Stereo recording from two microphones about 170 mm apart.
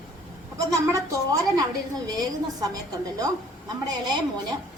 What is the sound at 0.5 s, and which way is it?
A woman's voice, 20° right (ahead or behind).